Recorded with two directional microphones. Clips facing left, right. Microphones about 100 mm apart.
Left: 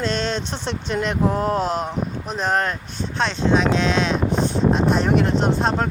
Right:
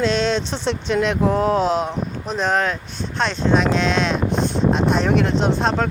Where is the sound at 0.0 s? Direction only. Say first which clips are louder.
Right 4 dB; 50° left (ahead or behind).